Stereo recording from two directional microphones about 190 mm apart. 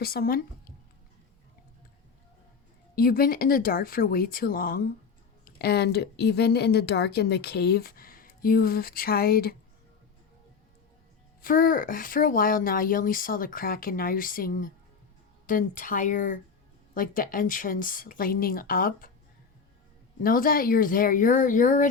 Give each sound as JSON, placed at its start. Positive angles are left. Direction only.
{"t": 0.0, "sound": "speech", "side_deg": 55}
{"t": 2.9, "sound": "a woman's voice", "side_deg": 50}
{"t": 11.4, "sound": "speech", "side_deg": 45}
{"t": 20.2, "sound": "speech", "side_deg": 50}